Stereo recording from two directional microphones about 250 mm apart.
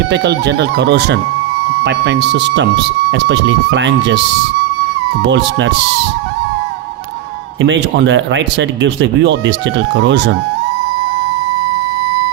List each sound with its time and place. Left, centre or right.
0.1 s speech: right
5.2 s speech: right
7.6 s speech: right